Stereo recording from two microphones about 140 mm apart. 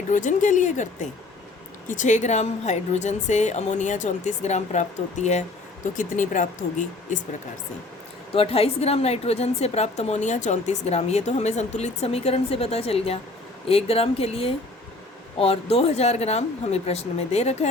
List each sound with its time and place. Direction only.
0.1 s a woman's voice: 65° left (ahead or behind)
1.9 s a woman's voice: 60° left (ahead or behind)
6.0 s speech: 65° left (ahead or behind)
8.3 s a woman's voice: 45° left (ahead or behind)